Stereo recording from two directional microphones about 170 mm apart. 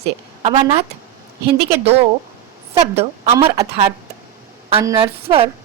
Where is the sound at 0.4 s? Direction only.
35° right (ahead or behind).